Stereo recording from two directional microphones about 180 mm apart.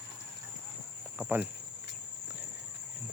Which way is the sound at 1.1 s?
10° right (ahead or behind).